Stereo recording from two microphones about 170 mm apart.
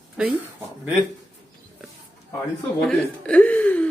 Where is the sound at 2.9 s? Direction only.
5° left (ahead or behind).